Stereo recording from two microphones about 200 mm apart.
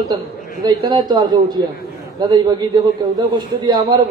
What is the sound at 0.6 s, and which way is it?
A man's voice, 20° right (ahead or behind).